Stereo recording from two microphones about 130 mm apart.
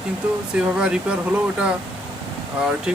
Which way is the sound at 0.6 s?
5° right (ahead or behind).